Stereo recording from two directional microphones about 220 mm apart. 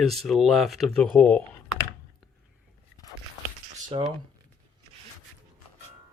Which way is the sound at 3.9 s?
25° right (ahead or behind).